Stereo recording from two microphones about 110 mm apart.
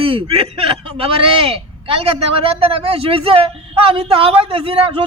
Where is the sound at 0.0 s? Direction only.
55° right (ahead or behind).